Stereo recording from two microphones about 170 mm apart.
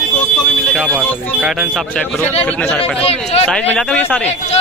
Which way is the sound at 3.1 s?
35° left (ahead or behind).